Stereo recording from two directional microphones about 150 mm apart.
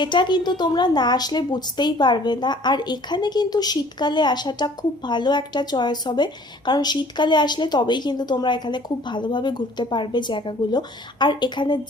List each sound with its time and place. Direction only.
0.0 s a woman's voice: 30° left (ahead or behind)